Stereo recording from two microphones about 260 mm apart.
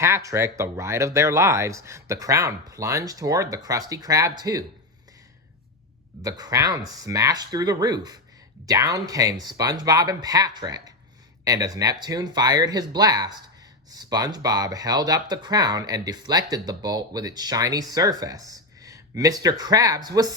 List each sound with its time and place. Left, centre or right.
0.0 s speech: centre
6.2 s speech: centre